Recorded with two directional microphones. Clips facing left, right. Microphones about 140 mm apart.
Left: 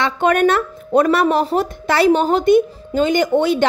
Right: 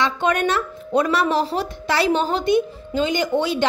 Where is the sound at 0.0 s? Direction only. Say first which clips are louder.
Left 5 dB; 50° left (ahead or behind).